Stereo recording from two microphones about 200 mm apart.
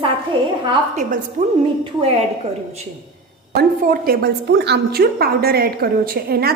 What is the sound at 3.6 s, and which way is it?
A woman's voice, 50° right (ahead or behind).